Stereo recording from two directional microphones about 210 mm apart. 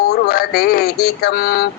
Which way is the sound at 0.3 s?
45° left (ahead or behind).